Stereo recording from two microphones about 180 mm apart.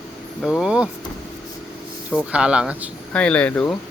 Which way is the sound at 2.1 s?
5° right (ahead or behind).